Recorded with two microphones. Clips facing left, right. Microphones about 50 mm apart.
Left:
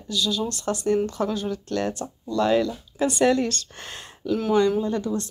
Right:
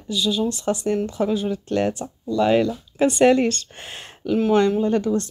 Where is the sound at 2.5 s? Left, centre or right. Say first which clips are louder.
Right 3 dB; right.